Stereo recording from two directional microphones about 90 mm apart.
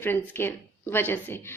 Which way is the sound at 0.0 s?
25° left (ahead or behind).